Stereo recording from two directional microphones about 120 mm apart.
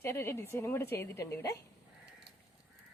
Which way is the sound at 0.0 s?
20° left (ahead or behind).